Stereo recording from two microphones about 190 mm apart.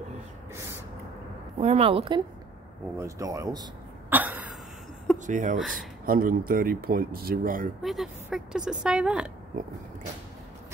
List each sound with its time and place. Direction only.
1.6 s a woman's voice: 30° right (ahead or behind)
3.0 s speech: 15° right (ahead or behind)
4.1 s throat clearing: 10° right (ahead or behind)
5.2 s speech: 40° right (ahead or behind)
5.6 s speech: centre (ahead or behind)
6.0 s speech: 50° right (ahead or behind)
7.8 s speech: centre (ahead or behind)